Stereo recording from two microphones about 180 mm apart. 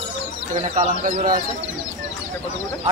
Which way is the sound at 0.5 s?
40° right (ahead or behind).